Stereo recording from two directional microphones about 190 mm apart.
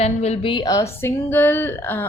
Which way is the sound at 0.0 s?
35° left (ahead or behind).